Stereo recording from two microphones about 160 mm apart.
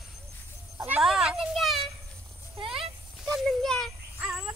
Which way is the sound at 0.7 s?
5° right (ahead or behind).